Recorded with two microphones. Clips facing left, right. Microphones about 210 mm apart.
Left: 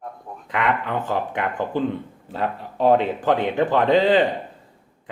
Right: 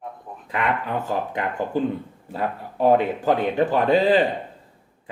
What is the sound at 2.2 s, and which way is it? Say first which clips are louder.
Speech: left 1 dB; 10° right (ahead or behind).